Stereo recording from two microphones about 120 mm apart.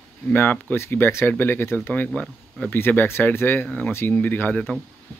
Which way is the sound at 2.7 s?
15° left (ahead or behind).